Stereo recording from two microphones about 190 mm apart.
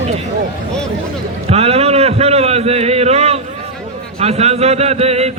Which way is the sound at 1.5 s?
35° right (ahead or behind).